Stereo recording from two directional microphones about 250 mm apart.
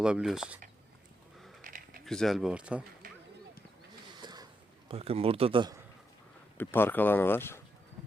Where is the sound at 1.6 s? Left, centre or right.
Right.